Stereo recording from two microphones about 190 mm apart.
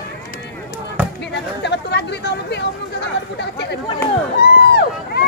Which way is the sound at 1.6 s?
60° left (ahead or behind).